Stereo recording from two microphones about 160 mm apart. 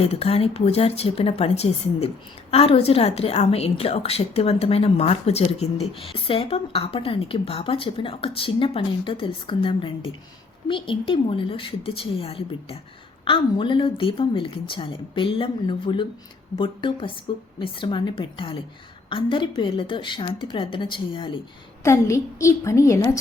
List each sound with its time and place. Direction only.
0.0 s a woman's voice: 40° left (ahead or behind)
21.8 s a woman's voice: 20° left (ahead or behind)